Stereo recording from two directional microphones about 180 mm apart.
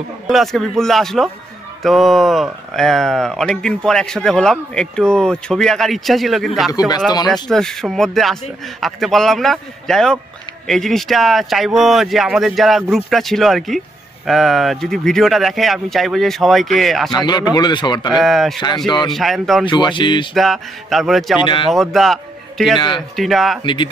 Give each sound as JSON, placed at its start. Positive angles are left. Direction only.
{"t": 0.3, "sound": "speech", "side_deg": 0}
{"t": 17.3, "sound": "a man's voice", "side_deg": 25}
{"t": 18.1, "sound": "speech", "side_deg": 0}
{"t": 19.6, "sound": "a man's voice", "side_deg": 25}
{"t": 20.3, "sound": "a man's voice", "side_deg": 0}
{"t": 22.8, "sound": "a man's voice", "side_deg": 25}
{"t": 23.1, "sound": "speech", "side_deg": 0}
{"t": 23.6, "sound": "a man's voice", "side_deg": 25}